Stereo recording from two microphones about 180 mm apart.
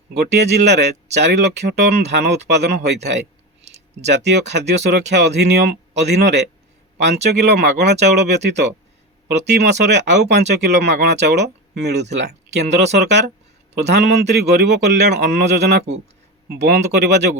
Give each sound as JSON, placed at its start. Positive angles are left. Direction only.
{"t": 0.2, "sound": "a man's voice", "side_deg": -70}
{"t": 3.6, "sound": "a sound", "side_deg": -35}
{"t": 4.0, "sound": "a man's voice", "side_deg": -75}